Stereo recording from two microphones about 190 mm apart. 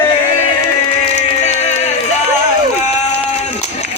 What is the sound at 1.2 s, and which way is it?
Music, 35° left (ahead or behind).